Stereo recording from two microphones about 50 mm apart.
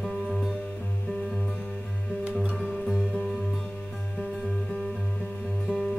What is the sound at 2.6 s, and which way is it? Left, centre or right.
Music, centre.